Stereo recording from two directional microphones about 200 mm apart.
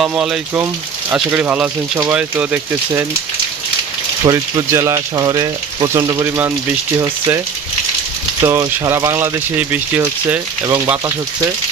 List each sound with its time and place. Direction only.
0.0 s speech: 5° right (ahead or behind)
4.3 s speech: 15° right (ahead or behind)